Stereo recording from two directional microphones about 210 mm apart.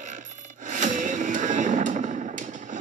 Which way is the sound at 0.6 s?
35° right (ahead or behind).